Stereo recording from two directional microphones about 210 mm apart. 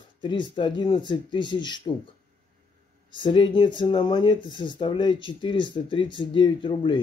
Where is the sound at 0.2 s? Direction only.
20° left (ahead or behind).